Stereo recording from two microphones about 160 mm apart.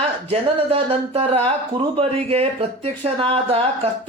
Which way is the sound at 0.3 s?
35° right (ahead or behind).